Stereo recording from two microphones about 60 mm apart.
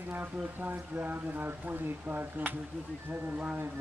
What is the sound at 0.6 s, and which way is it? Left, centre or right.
Speech, right.